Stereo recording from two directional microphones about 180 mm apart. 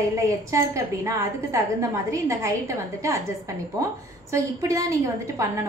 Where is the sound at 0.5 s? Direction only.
15° right (ahead or behind).